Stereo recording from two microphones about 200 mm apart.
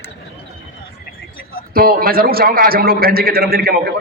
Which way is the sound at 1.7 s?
45° right (ahead or behind).